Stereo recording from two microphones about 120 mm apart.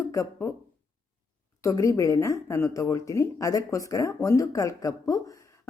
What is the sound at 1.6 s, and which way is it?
A woman's voice, 25° left (ahead or behind).